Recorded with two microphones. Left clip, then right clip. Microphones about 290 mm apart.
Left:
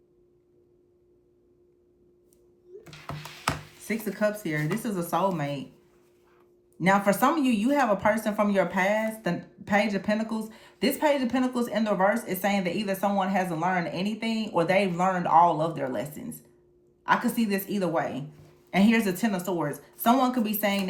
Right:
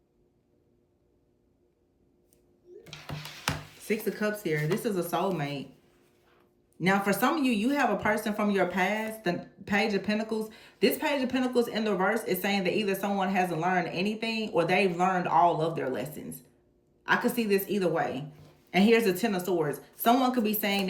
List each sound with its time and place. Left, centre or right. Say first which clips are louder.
3.4 s speech: left 3 dB; centre
6.7 s speech: left 4 dB; left